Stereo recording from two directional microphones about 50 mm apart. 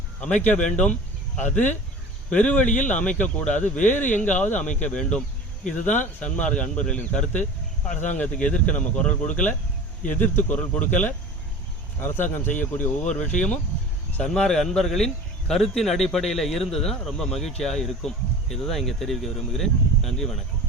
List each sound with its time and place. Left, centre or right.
0.2 s speech: left
10.5 s speech: left
11.9 s speech: left
12.5 s speech: left
13.1 s speech: left